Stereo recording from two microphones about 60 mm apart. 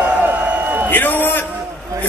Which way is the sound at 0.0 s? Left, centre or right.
Right.